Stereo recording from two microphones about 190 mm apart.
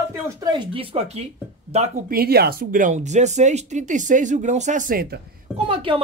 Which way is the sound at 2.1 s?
55° right (ahead or behind).